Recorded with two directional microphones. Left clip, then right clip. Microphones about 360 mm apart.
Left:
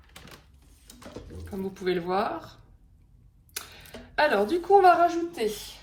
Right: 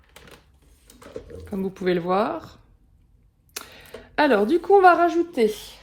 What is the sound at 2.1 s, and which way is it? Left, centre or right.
Speech, centre.